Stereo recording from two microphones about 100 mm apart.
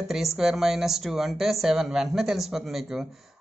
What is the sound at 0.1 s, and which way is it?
Speech, 5° right (ahead or behind).